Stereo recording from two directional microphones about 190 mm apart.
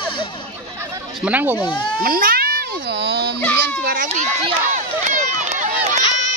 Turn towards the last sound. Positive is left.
turn(degrees=-35)  # may be behind; listen again after turning